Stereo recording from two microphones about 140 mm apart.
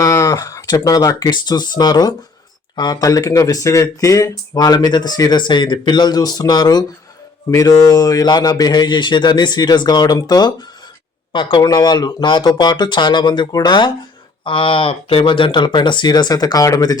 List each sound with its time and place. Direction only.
0.0 s speech: 20° left (ahead or behind)